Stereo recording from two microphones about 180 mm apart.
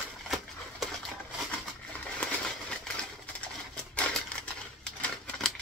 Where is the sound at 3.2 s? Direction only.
5° left (ahead or behind).